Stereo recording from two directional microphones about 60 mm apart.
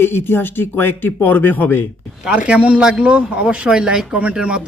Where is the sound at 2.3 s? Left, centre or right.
Right.